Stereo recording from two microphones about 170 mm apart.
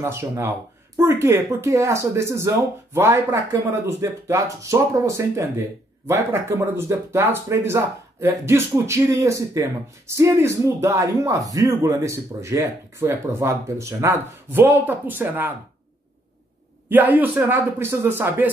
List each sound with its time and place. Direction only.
0.0 s speech: 15° right (ahead or behind)
16.9 s speech: 10° right (ahead or behind)